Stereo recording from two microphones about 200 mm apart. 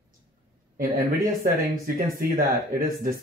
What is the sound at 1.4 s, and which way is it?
Speech, 45° right (ahead or behind).